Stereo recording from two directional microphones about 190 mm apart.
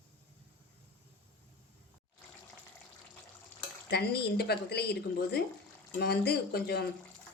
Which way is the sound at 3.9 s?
60° left (ahead or behind).